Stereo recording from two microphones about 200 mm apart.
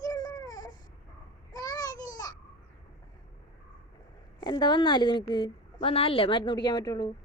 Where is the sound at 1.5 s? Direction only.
20° left (ahead or behind).